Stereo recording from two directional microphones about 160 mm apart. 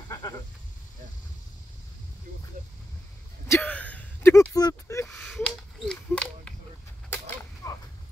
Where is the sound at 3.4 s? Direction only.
10° left (ahead or behind).